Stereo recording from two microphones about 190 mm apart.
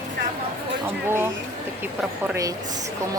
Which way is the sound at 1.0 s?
10° right (ahead or behind).